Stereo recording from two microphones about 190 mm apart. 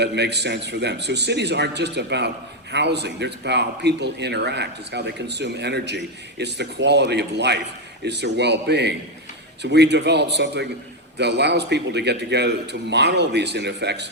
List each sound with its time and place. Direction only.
0.0 s speech: 60° right (ahead or behind)